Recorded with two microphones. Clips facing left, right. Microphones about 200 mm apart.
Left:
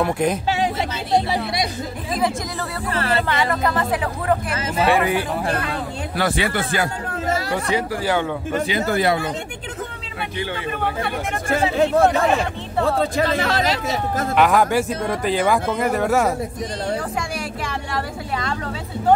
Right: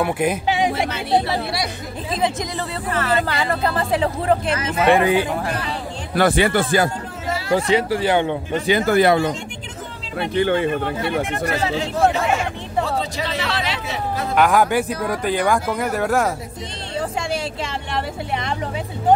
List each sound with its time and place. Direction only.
0.0 s speech: 5° right (ahead or behind)
1.3 s speech: 20° left (ahead or behind)
2.9 s music: 30° left (ahead or behind)
3.3 s speech: 35° right (ahead or behind)
6.1 s speech: 50° right (ahead or behind)
7.2 s chatter: 40° left (ahead or behind)
7.5 s speech: 25° right (ahead or behind)
8.8 s speech: 60° right (ahead or behind)
10.3 s speech: 55° right (ahead or behind)
11.7 s speech: 55° left (ahead or behind)
14.3 s speech: centre (ahead or behind)
16.9 s vehicle: 25° right (ahead or behind)